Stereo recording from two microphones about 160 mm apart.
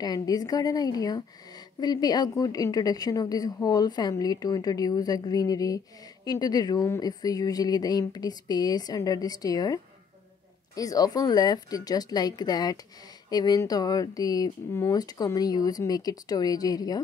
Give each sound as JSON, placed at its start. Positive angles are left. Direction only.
{"t": 0.0, "sound": "a woman's voice", "side_deg": 25}